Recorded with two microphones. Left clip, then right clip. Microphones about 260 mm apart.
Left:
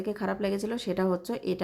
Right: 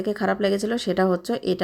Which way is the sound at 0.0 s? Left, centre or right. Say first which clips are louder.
Right 8 dB; centre.